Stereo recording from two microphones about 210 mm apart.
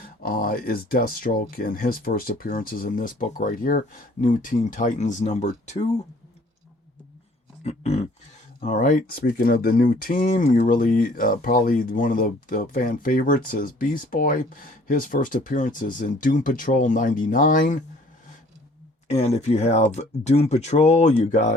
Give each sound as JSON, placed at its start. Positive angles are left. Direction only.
{"t": 0.0, "sound": "speech", "side_deg": 40}
{"t": 7.6, "sound": "a sound", "side_deg": 30}
{"t": 8.6, "sound": "speech", "side_deg": 35}
{"t": 19.0, "sound": "speech", "side_deg": 30}